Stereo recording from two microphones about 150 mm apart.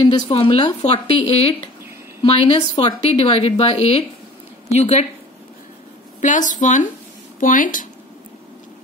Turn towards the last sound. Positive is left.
turn(degrees=60)  # may be behind; listen again after turning